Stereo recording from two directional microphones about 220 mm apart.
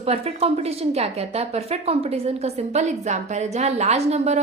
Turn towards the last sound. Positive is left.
turn(degrees=-30)  # may be behind; listen again after turning